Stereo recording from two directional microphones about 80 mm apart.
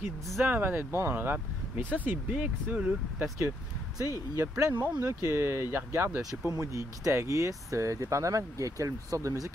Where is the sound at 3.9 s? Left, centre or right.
Right.